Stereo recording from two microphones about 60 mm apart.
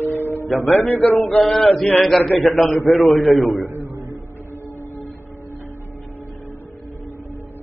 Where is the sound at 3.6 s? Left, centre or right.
Right.